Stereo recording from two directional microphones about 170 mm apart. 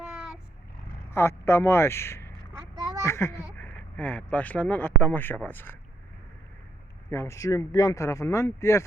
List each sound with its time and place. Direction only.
0.0 s vehicle: 5° right (ahead or behind)
1.1 s a man's voice: 15° left (ahead or behind)
2.7 s a sound: 20° right (ahead or behind)
3.0 s speech: 15° left (ahead or behind)
7.1 s speech: 15° left (ahead or behind)